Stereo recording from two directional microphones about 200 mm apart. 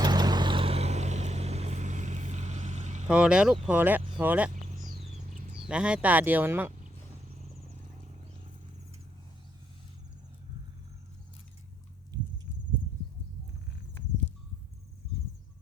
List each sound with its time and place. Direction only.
0.0 s vehicle: 20° right (ahead or behind); by 3.1 s 35° right (ahead or behind)
3.1 s speech: 5° right (ahead or behind)
5.6 s speech: 5° right (ahead or behind)